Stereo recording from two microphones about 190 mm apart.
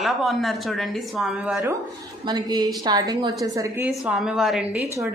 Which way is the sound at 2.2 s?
20° right (ahead or behind).